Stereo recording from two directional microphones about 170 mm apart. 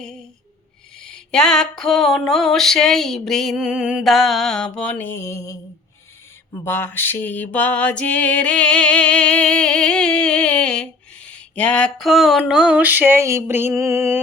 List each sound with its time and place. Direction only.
0.0 s a sound: 5° left (ahead or behind)
0.9 s music: 5° left (ahead or behind)
6.7 s music: 15° left (ahead or behind); by 14.2 s 15° right (ahead or behind)